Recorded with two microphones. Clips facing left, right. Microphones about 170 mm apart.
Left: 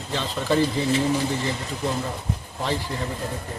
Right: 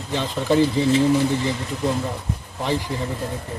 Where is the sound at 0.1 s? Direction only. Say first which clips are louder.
Right 3 dB; 15° right (ahead or behind).